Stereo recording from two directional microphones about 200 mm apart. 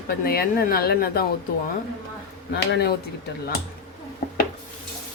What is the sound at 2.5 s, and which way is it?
Speech, 55° left (ahead or behind).